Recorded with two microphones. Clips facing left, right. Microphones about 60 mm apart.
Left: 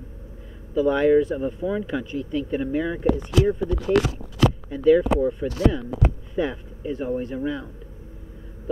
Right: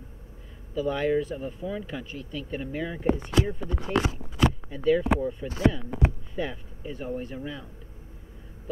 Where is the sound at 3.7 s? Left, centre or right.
Left.